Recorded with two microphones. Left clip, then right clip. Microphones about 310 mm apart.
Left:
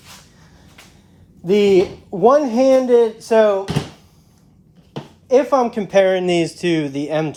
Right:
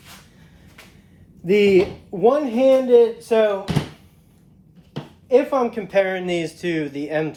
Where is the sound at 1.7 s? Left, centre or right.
Left.